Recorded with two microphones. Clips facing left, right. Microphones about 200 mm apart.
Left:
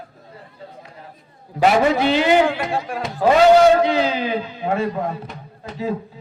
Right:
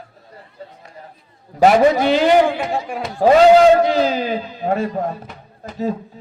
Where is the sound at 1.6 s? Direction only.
40° right (ahead or behind).